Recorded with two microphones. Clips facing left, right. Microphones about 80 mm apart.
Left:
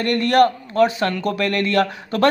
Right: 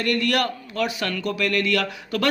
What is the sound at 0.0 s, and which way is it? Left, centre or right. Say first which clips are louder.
Speech: left 7 dB; left.